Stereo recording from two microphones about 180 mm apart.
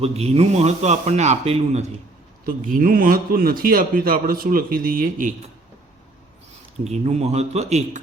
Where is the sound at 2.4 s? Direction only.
50° right (ahead or behind).